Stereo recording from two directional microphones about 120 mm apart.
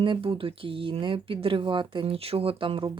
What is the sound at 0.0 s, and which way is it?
Speech, 45° right (ahead or behind).